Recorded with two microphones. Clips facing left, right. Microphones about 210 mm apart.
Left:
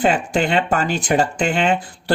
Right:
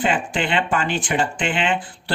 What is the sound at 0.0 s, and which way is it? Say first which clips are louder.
Speech: left 4 dB; 40° left (ahead or behind).